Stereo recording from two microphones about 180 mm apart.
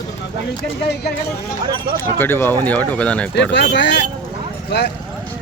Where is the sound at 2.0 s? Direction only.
10° left (ahead or behind).